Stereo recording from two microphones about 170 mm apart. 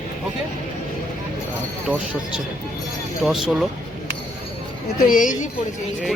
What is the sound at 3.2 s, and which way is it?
Speech, centre (ahead or behind).